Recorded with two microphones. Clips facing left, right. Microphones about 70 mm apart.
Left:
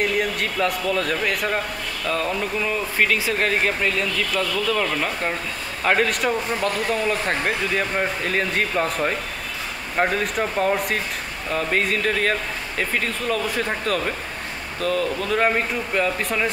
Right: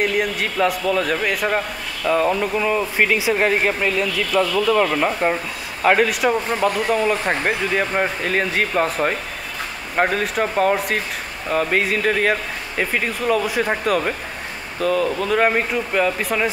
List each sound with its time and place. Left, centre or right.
0.0 s speech: centre
2.0 s speech: centre
5.9 s speech: centre
8.2 s speech: centre
11.5 s speech: centre